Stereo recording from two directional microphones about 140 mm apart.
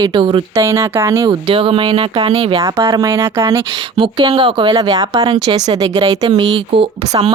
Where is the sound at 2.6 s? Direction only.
20° right (ahead or behind).